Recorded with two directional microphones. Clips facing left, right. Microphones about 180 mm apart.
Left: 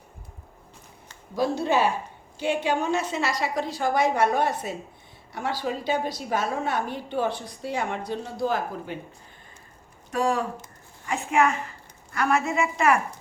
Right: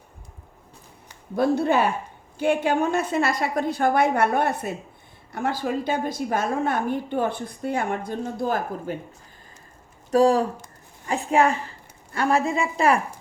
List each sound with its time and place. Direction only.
1.4 s a woman's voice: 55° right (ahead or behind)
10.1 s a woman's voice: 35° right (ahead or behind)